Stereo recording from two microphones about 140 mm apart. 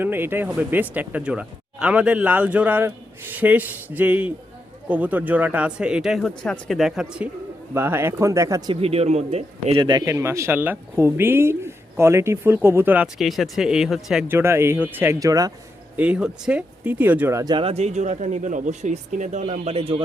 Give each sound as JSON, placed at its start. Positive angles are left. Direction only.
{"t": 0.0, "sound": "speech", "side_deg": -15}
{"t": 7.7, "sound": "speech", "side_deg": -15}
{"t": 8.7, "sound": "speech", "side_deg": -45}
{"t": 9.8, "sound": "speech", "side_deg": -25}
{"t": 13.1, "sound": "speech", "side_deg": 0}
{"t": 14.3, "sound": "speech", "side_deg": -20}
{"t": 16.0, "sound": "speech", "side_deg": -10}
{"t": 17.5, "sound": "speech", "side_deg": -40}